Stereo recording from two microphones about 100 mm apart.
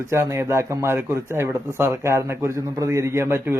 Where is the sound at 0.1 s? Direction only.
25° right (ahead or behind).